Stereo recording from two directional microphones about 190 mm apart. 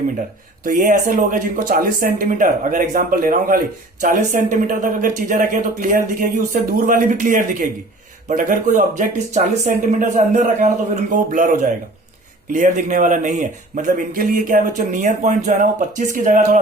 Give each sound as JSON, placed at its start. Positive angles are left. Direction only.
{"t": 0.6, "sound": "a man's voice", "side_deg": -45}